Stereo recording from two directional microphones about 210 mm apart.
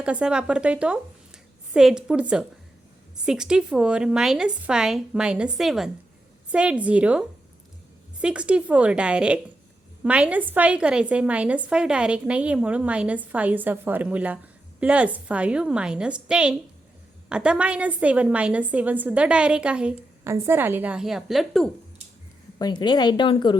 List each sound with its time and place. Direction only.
0.0 s a woman's voice: 5° right (ahead or behind)
22.5 s a woman's voice: 20° left (ahead or behind)